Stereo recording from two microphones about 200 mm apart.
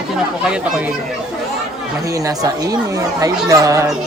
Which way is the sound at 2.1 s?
15° right (ahead or behind).